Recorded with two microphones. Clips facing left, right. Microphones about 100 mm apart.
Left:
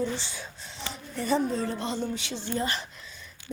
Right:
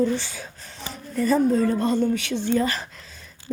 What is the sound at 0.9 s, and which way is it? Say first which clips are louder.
Speech: right 6 dB; 40° right (ahead or behind).